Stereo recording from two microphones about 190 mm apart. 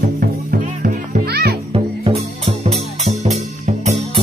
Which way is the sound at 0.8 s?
55° right (ahead or behind).